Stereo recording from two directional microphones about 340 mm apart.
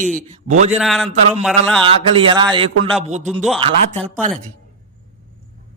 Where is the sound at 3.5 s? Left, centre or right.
Centre.